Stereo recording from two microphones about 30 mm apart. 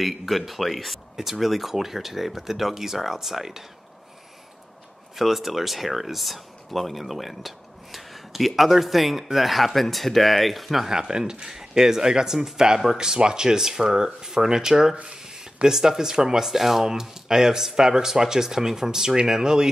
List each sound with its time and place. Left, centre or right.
0.0 s speech: centre
1.1 s speech: centre
1.4 s speech: centre
5.1 s speech: centre
10.9 s speech: right